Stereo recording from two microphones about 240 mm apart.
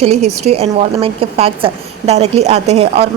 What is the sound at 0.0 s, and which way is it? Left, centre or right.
A woman's voice, right.